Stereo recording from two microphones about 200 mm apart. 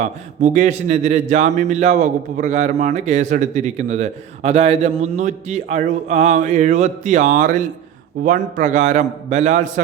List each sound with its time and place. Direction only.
0.0 s a man's voice: 35° right (ahead or behind)